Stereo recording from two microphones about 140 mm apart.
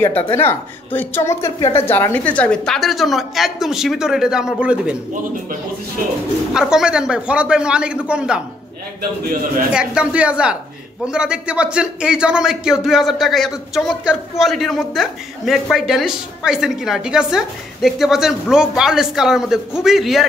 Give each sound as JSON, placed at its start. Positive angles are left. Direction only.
{"t": 0.3, "sound": "a man's voice", "side_deg": 15}
{"t": 6.5, "sound": "speech", "side_deg": -5}
{"t": 9.7, "sound": "a man's voice", "side_deg": -5}